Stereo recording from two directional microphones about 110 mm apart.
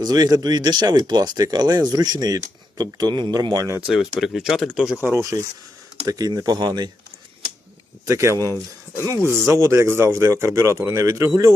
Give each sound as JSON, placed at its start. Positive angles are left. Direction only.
{"t": 0.0, "sound": "speech", "side_deg": -35}
{"t": 3.8, "sound": "speech", "side_deg": -5}
{"t": 4.9, "sound": "speech", "side_deg": -25}
{"t": 8.0, "sound": "speech", "side_deg": -25}